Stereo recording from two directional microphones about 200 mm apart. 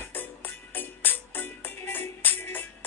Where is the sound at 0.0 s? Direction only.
10° left (ahead or behind).